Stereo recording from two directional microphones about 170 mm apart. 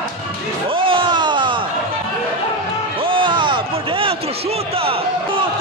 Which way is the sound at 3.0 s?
30° right (ahead or behind).